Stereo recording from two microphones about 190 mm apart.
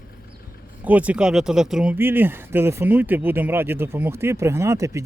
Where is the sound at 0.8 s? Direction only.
10° right (ahead or behind).